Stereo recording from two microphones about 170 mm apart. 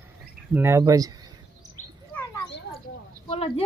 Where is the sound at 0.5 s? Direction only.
15° right (ahead or behind).